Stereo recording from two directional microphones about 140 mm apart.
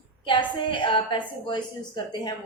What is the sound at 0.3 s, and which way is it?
Speech, 35° left (ahead or behind).